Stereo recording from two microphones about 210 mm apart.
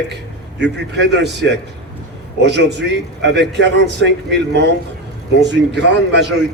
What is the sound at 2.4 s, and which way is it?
A man's voice, 55° right (ahead or behind).